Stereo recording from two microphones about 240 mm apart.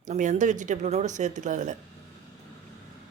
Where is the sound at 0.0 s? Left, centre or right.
Right.